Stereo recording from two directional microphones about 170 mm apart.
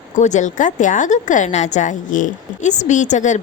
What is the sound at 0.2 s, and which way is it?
A woman's voice, 45° left (ahead or behind).